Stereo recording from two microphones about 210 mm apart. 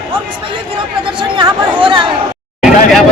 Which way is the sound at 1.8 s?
25° right (ahead or behind).